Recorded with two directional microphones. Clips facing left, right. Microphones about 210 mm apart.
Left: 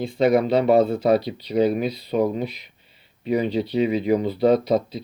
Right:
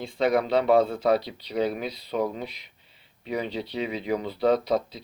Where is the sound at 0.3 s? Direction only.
15° left (ahead or behind).